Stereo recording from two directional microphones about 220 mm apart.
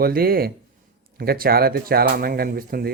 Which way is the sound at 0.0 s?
45° right (ahead or behind).